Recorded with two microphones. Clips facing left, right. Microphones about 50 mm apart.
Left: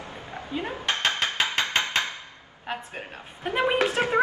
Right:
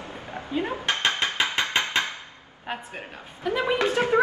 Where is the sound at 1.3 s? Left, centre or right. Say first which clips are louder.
Right 1 dB; right.